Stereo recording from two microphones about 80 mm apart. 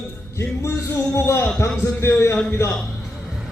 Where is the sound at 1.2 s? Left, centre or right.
Left.